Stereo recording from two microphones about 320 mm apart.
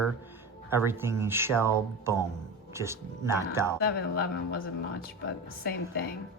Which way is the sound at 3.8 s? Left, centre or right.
Left.